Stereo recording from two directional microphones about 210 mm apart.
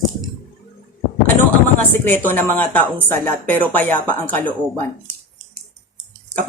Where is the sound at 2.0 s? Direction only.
10° left (ahead or behind).